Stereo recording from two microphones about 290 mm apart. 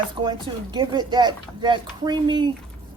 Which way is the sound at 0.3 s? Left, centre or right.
Centre.